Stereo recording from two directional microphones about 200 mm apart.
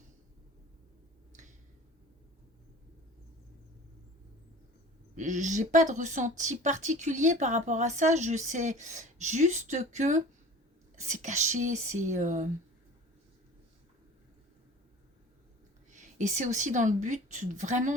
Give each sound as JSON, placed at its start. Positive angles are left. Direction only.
{"t": 1.3, "sound": "a sound", "side_deg": -40}
{"t": 5.1, "sound": "speech", "side_deg": -40}
{"t": 15.9, "sound": "speech", "side_deg": -40}